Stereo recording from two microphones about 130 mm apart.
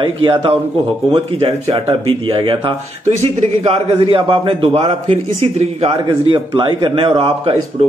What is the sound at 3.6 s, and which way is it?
A man's voice, 45° right (ahead or behind).